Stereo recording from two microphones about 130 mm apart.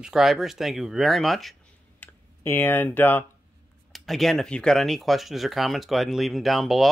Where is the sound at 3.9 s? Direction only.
Centre (ahead or behind).